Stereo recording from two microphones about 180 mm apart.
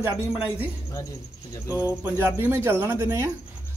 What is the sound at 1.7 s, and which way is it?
A man's voice, 10° right (ahead or behind).